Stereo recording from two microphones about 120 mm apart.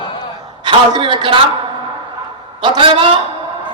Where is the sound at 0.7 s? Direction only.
40° right (ahead or behind).